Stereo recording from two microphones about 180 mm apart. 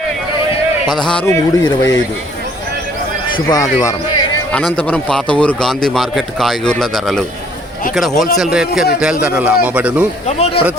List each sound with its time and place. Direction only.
0.9 s a man's voice: 5° left (ahead or behind)
1.3 s speech: 20° left (ahead or behind)
3.3 s speech: 20° left (ahead or behind)
4.5 s a man's voice: 5° left (ahead or behind)
10.2 s speech: 35° left (ahead or behind)